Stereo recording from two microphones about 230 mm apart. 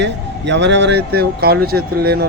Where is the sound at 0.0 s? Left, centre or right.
Right.